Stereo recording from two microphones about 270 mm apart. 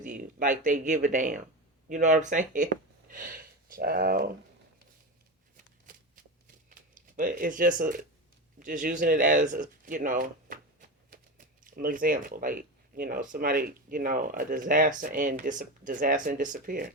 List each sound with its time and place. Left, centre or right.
0.0 s speech: right
5.9 s shuffling cards: right
6.9 s speech: right